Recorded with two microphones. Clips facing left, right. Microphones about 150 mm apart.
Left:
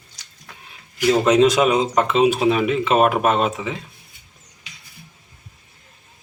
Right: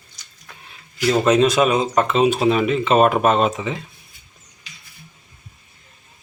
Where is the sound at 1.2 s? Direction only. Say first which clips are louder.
Even; 15° left (ahead or behind).